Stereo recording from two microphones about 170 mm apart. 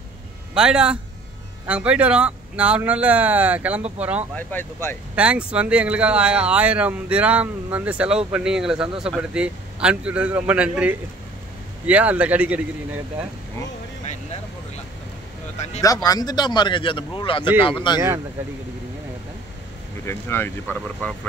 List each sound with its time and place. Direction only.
0.6 s a man's voice: 5° right (ahead or behind)
4.4 s speech: 10° left (ahead or behind)
5.1 s a man's voice: 10° right (ahead or behind)
15.8 s a man's voice: 20° left (ahead or behind)
20.1 s speech: 15° left (ahead or behind)